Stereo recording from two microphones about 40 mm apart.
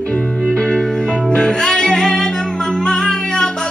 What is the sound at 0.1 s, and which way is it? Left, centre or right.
Music, left.